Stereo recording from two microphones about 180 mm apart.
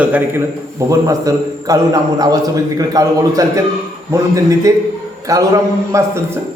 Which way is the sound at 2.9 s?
20° right (ahead or behind).